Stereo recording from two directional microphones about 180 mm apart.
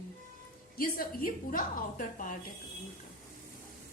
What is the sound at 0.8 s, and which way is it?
A woman's voice, 50° left (ahead or behind).